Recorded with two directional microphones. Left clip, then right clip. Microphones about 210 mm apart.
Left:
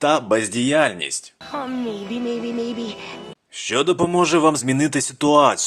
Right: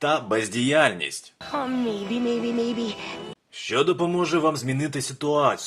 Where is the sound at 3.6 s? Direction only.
25° left (ahead or behind).